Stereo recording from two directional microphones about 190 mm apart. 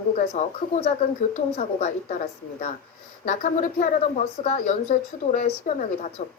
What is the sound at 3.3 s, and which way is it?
Speech, 45° left (ahead or behind).